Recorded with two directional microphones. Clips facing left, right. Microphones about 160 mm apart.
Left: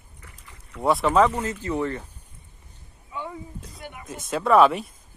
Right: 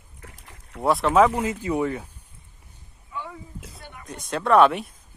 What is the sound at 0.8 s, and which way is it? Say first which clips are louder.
Speech: right 1 dB; centre (ahead or behind).